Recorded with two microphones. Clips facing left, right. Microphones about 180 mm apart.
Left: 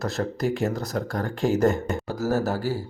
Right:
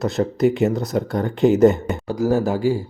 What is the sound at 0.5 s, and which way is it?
Speech, 20° right (ahead or behind).